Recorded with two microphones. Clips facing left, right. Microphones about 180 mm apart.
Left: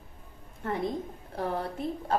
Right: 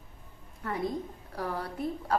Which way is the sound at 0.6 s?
25° left (ahead or behind).